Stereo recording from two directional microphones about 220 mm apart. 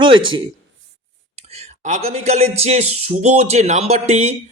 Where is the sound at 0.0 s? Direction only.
20° right (ahead or behind).